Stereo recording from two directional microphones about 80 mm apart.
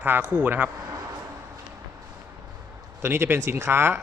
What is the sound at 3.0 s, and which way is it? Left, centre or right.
Speech, right.